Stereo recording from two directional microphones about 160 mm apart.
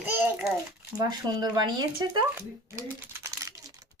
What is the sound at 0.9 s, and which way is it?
Speech, 25° right (ahead or behind).